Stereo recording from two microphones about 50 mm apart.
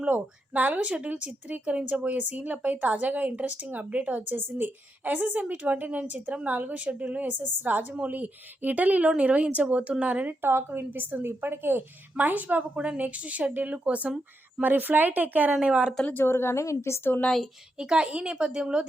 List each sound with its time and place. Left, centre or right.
0.0 s a woman's voice: right
7.3 s a woman's voice: right
10.4 s a woman's voice: right
12.1 s speech: right
12.7 s a woman's voice: right
14.6 s a woman's voice: right
16.1 s a woman's voice: left
17.7 s a woman's voice: centre